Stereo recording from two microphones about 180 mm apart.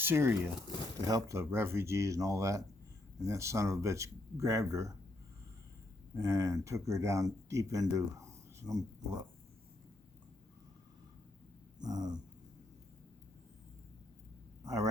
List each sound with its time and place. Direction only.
0.0 s speech: 10° right (ahead or behind)
6.1 s speech: 15° right (ahead or behind)
11.8 s dog: 20° right (ahead or behind)
14.6 s a sound: 20° right (ahead or behind)